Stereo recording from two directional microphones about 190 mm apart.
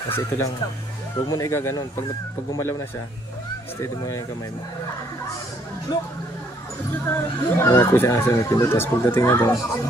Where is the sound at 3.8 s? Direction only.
15° left (ahead or behind).